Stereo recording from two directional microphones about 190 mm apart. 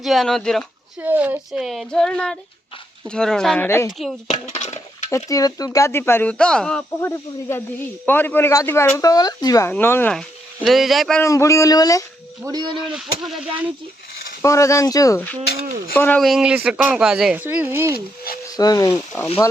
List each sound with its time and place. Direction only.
0.0 s speech: centre (ahead or behind)
1.0 s speech: 10° right (ahead or behind)
3.7 s speech: 15° left (ahead or behind)
4.3 s speech: 35° left (ahead or behind)
5.0 s speech: 20° left (ahead or behind)
7.0 s speech: 15° left (ahead or behind); by 11.2 s centre (ahead or behind)
11.2 s speech: 15° left (ahead or behind)
12.4 s speech: 20° right (ahead or behind)
12.9 s speech: centre (ahead or behind)
14.4 s speech: 15° left (ahead or behind); by 17.9 s 10° right (ahead or behind)
18.5 s speech: 20° left (ahead or behind)